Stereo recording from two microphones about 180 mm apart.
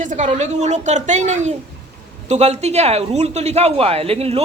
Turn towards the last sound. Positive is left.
turn(degrees=-35)  # may be behind; listen again after turning